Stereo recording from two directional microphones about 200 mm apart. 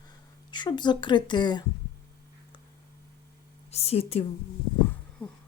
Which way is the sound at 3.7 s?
30° left (ahead or behind).